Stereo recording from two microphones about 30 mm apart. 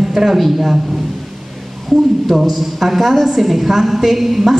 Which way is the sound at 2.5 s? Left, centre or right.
Centre.